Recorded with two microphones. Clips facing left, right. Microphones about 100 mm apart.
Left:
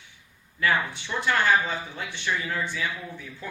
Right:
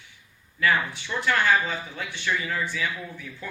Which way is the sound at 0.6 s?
20° left (ahead or behind).